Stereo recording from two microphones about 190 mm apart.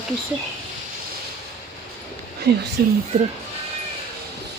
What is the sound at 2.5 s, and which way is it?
Speech, 55° right (ahead or behind).